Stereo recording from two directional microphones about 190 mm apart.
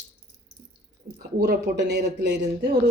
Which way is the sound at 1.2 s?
55° right (ahead or behind).